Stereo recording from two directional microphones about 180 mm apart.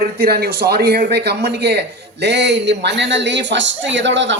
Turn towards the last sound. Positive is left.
turn(degrees=-90)